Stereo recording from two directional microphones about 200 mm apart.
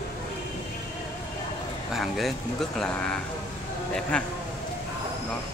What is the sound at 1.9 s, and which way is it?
Speech, centre (ahead or behind).